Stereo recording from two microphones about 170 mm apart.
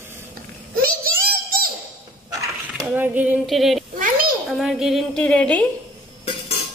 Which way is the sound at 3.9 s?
55° right (ahead or behind).